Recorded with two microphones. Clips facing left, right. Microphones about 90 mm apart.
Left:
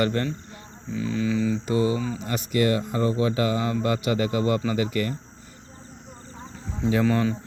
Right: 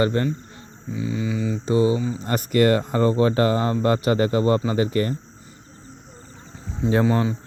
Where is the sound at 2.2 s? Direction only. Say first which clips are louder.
Right 5 dB; 45° right (ahead or behind).